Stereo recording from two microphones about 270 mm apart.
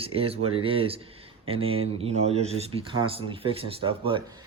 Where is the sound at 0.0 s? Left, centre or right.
Right.